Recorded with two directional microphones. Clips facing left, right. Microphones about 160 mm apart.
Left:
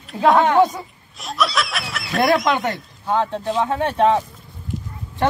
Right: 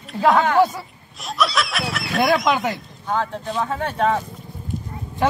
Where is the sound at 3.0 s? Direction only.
25° left (ahead or behind).